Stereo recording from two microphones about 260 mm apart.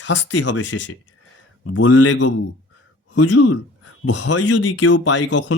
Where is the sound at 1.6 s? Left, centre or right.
Left.